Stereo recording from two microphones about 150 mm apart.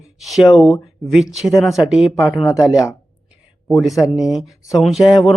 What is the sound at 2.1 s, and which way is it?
Speech, 20° left (ahead or behind).